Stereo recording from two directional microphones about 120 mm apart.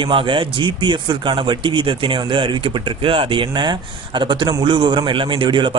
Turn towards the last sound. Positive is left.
turn(degrees=-45)  # may be behind; listen again after turning